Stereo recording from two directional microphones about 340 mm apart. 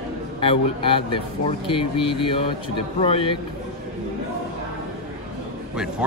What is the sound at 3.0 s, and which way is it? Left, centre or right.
Speech, centre.